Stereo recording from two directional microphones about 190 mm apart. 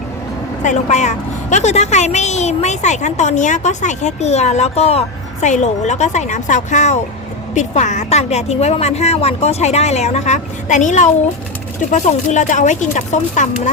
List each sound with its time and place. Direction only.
0.6 s a woman's voice: 40° left (ahead or behind)